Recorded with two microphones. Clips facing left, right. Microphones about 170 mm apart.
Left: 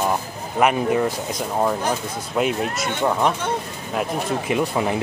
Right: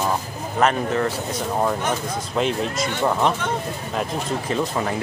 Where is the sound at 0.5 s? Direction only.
10° left (ahead or behind).